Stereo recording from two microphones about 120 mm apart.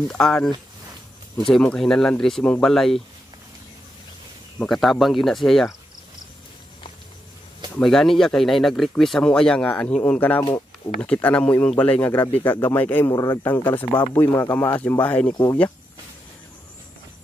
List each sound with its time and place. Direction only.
0.1 s speech: 5° left (ahead or behind)
1.5 s speech: 5° left (ahead or behind)
4.6 s speech: centre (ahead or behind)
7.8 s speech: 5° left (ahead or behind)
13.1 s speech: 25° left (ahead or behind)
13.9 s speech: 45° left (ahead or behind)
14.2 s speech: 25° left (ahead or behind)